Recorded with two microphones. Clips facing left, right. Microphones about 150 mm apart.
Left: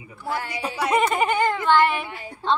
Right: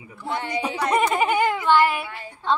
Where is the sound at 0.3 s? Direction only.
20° right (ahead or behind).